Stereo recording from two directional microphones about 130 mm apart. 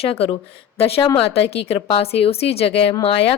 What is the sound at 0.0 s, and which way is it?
A woman's voice, 50° left (ahead or behind).